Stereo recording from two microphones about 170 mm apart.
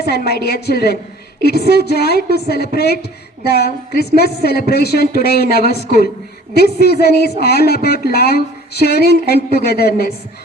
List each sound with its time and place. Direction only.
0.0 s speech: 70° left (ahead or behind)